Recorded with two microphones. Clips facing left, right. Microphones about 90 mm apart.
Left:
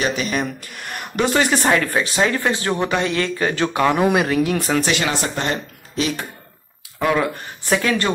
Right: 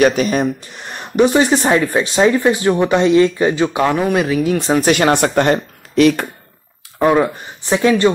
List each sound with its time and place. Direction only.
0.0 s speech: 45° right (ahead or behind)
0.6 s speech: 25° right (ahead or behind)
3.9 s speech: 5° left (ahead or behind)
4.8 s speech: 50° right (ahead or behind)
7.0 s speech: 30° right (ahead or behind)
7.3 s speech: 20° right (ahead or behind)